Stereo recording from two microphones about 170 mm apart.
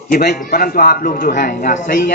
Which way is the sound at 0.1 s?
60° left (ahead or behind).